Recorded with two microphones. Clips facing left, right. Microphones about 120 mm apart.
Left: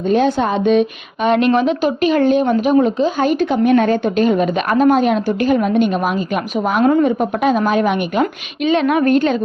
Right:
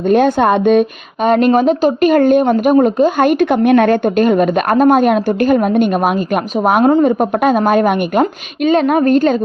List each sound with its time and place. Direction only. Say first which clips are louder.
0.1 s a woman's voice: right 4 dB; 55° right (ahead or behind)
6.8 s a woman's voice: even; 35° right (ahead or behind)